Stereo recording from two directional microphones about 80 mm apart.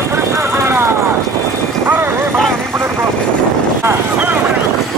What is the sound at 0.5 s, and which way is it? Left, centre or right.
Vehicle, right.